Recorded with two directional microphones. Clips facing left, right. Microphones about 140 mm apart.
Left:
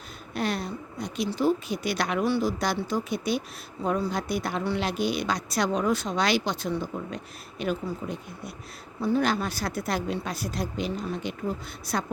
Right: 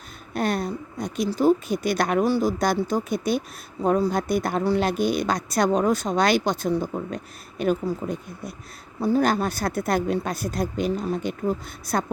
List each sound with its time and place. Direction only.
0.3 s a woman's voice: 45° right (ahead or behind)